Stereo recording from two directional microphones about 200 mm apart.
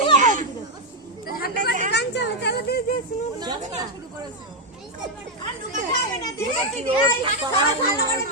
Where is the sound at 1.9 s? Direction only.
60° left (ahead or behind).